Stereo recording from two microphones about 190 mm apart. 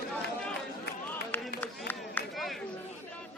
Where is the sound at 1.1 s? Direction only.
10° left (ahead or behind).